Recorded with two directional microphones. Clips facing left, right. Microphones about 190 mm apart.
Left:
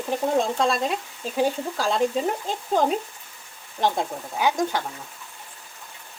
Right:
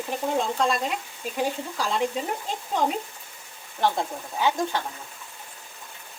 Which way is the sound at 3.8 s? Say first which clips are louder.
Left 1 dB; 15° left (ahead or behind).